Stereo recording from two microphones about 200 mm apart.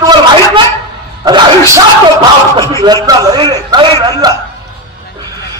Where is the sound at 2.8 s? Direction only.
20° right (ahead or behind).